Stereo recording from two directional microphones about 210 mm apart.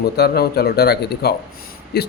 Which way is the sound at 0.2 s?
50° left (ahead or behind).